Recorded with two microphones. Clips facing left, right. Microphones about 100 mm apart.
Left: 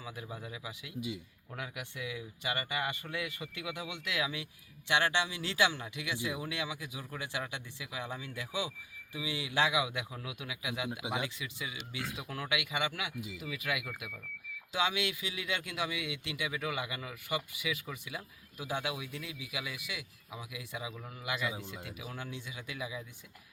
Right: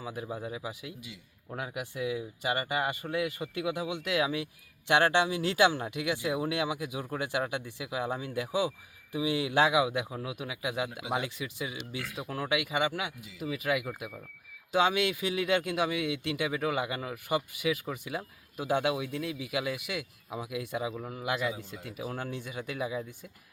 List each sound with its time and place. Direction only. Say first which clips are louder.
0.0 s speech: right 7 dB; 40° right (ahead or behind)
14.7 s speech: right 7 dB; 50° right (ahead or behind)
20.9 s speech: right 8 dB; 30° right (ahead or behind)
21.2 s speech: right 4 dB; 45° right (ahead or behind)